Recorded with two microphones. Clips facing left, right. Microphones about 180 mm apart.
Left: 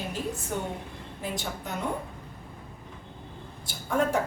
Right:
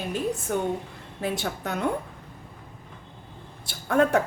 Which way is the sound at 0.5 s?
60° right (ahead or behind).